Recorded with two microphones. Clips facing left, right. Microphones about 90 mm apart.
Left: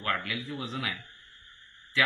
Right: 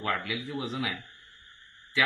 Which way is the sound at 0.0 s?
15° right (ahead or behind).